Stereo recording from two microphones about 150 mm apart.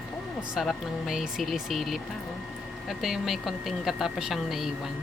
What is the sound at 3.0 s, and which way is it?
Speech, centre (ahead or behind).